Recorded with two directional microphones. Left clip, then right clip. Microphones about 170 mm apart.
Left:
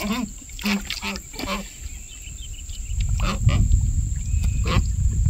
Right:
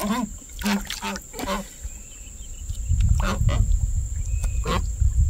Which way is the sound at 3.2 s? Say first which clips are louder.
Left 1 dB; 15° right (ahead or behind).